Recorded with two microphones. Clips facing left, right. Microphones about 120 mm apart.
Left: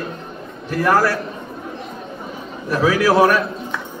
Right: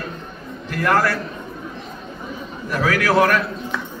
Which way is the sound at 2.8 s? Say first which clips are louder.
Left 4 dB; 15° left (ahead or behind).